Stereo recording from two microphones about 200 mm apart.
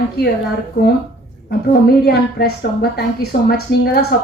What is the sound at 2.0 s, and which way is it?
A woman's voice, 50° left (ahead or behind).